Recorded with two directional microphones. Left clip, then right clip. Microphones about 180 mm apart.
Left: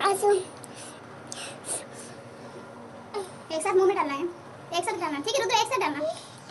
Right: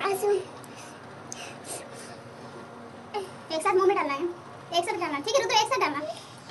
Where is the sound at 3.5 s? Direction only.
5° left (ahead or behind).